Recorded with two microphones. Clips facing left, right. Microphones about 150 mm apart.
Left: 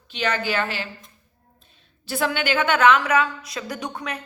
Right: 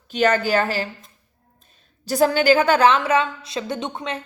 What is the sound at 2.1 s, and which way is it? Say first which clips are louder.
A woman's voice: right 8 dB; 40° right (ahead or behind).